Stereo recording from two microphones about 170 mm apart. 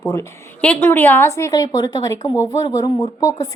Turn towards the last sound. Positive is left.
turn(degrees=20)  # may be behind; listen again after turning